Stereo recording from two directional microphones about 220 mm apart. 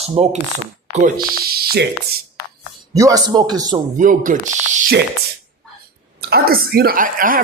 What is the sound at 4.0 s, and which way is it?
Speech, 35° right (ahead or behind).